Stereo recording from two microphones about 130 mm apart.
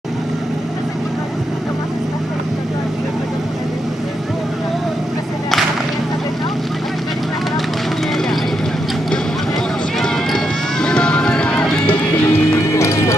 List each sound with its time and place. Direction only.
9.9 s run: 5° left (ahead or behind)
12.3 s music: 20° left (ahead or behind)